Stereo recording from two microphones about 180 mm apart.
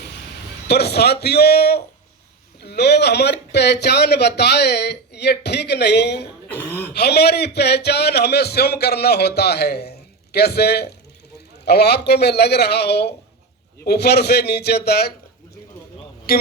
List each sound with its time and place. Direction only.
0.7 s a man's voice: 65° left (ahead or behind)
6.5 s speech: 10° left (ahead or behind)
6.9 s a man's voice: 65° left (ahead or behind)
16.3 s speech: 60° left (ahead or behind)